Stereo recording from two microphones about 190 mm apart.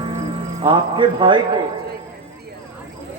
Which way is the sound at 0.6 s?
25° right (ahead or behind).